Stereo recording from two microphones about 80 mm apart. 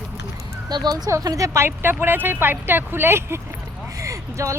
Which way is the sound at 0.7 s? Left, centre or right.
Right.